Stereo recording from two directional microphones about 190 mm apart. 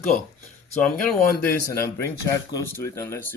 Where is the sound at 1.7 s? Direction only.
15° left (ahead or behind).